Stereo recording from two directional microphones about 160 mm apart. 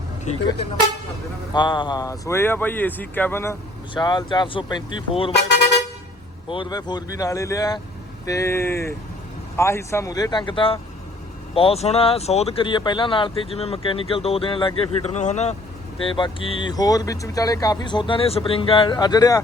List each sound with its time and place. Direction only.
0.3 s speech: 45° left (ahead or behind)
1.5 s speech: 30° left (ahead or behind)
3.9 s speech: 30° left (ahead or behind)
6.5 s speech: 30° left (ahead or behind); by 15.5 s 45° left (ahead or behind)
16.0 s speech: 30° left (ahead or behind)